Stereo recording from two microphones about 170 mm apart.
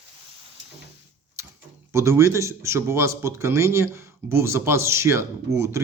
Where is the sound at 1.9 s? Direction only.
15° right (ahead or behind).